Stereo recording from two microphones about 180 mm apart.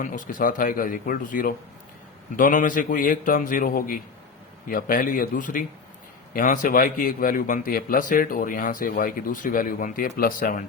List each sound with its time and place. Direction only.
0.0 s a man's voice: 50° left (ahead or behind)